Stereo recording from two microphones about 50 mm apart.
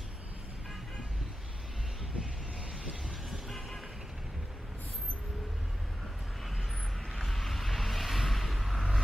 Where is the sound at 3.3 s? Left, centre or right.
Centre.